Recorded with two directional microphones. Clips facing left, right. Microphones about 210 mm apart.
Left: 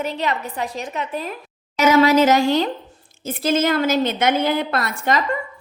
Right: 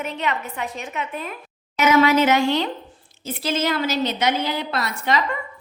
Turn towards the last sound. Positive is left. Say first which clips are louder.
# left 2 dB
turn(degrees=50)  # may be behind; listen again after turning